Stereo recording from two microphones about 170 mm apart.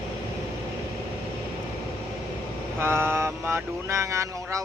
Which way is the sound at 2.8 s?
15° right (ahead or behind).